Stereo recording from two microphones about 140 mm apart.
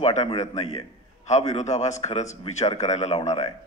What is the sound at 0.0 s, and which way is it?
A man's voice, 55° left (ahead or behind).